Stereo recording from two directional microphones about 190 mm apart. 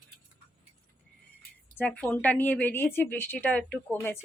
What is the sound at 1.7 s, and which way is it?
Speech, 10° left (ahead or behind).